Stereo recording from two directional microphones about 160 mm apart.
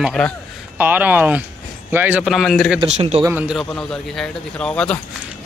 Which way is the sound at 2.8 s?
40° right (ahead or behind).